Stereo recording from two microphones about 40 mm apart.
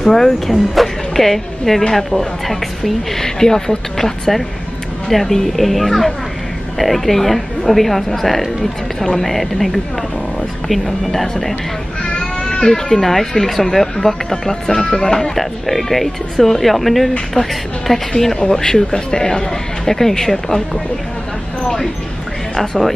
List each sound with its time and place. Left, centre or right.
0.0 s speech: centre
12.0 s goat: left
13.0 s speech: centre
22.6 s speech: centre